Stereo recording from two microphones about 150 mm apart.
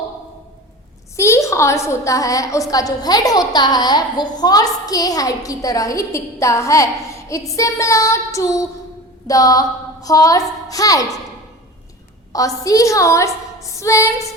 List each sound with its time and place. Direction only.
1.1 s a woman's voice: 20° left (ahead or behind)
9.2 s a sound: 25° left (ahead or behind)
10.7 s a woman's voice: 25° left (ahead or behind)
12.3 s a woman's voice: 25° left (ahead or behind)